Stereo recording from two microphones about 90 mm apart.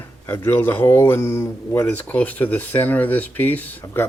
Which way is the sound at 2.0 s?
15° left (ahead or behind).